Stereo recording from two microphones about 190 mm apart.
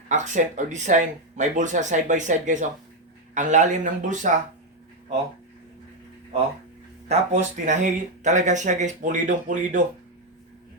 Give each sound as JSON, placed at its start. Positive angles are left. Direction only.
{"t": 0.1, "sound": "speech", "side_deg": -40}
{"t": 7.1, "sound": "speech", "side_deg": -40}